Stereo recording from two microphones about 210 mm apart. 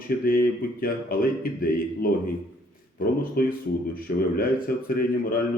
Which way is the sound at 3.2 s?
45° left (ahead or behind).